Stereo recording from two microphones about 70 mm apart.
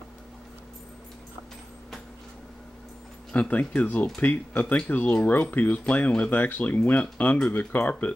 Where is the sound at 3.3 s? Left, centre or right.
Left.